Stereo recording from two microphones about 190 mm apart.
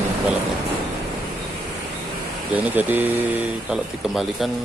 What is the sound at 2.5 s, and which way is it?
Speech, 10° right (ahead or behind).